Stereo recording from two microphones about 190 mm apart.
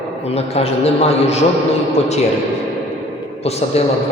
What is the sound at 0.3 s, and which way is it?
A man's voice, 30° left (ahead or behind).